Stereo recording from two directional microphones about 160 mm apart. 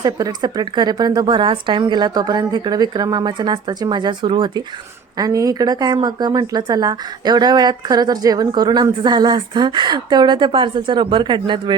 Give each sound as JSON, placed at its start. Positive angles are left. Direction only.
{"t": 0.0, "sound": "speech", "side_deg": -25}